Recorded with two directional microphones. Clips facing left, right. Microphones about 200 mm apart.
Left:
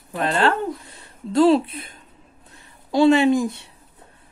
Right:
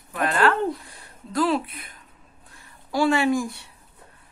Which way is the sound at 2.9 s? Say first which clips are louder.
Left 6 dB; 20° left (ahead or behind).